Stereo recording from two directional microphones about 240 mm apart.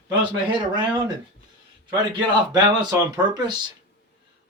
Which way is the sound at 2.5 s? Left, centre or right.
Centre.